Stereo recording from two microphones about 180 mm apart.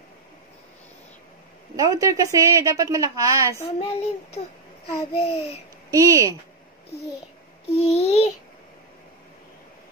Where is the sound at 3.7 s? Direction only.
35° left (ahead or behind).